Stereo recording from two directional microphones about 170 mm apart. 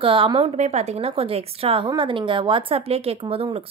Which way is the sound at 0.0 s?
30° right (ahead or behind).